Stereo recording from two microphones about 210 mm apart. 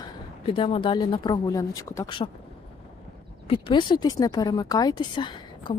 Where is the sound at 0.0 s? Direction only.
25° left (ahead or behind).